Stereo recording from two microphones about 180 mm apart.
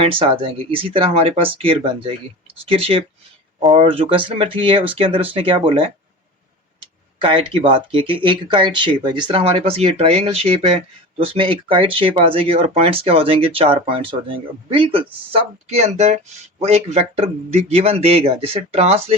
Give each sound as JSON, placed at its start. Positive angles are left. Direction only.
{"t": 0.0, "sound": "speech", "side_deg": -30}